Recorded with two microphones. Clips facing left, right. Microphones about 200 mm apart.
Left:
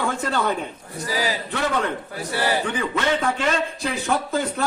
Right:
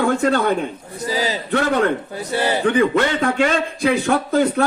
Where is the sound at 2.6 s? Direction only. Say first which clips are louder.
Right 8 dB; 60° right (ahead or behind).